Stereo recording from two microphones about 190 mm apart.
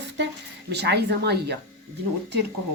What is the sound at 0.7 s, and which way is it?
Speech, 60° right (ahead or behind).